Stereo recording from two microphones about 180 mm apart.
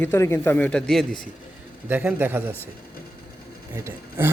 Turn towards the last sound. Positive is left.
turn(degrees=-15)  # may be behind; listen again after turning